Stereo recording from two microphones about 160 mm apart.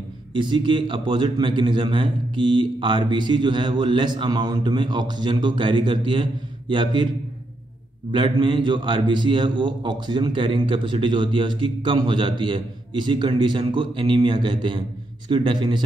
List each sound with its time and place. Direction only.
0.4 s a man's voice: 30° right (ahead or behind)
8.1 s a man's voice: 30° right (ahead or behind)